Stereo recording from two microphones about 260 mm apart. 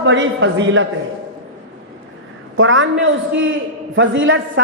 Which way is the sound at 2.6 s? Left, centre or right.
Right.